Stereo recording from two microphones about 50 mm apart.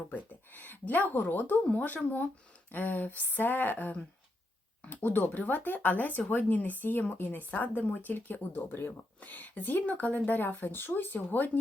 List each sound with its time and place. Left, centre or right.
0.1 s speech: left